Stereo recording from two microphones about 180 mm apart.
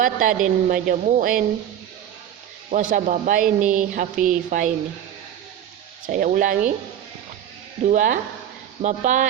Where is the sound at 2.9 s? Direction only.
45° right (ahead or behind).